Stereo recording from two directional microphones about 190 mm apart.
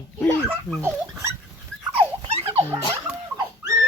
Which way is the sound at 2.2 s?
30° right (ahead or behind).